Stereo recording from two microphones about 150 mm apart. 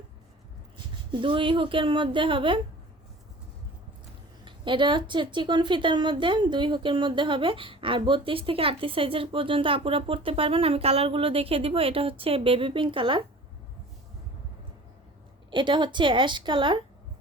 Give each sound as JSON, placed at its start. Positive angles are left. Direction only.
{"t": 1.1, "sound": "a woman's voice", "side_deg": -35}
{"t": 4.4, "sound": "a woman's voice", "side_deg": -35}
{"t": 15.4, "sound": "a woman's voice", "side_deg": -30}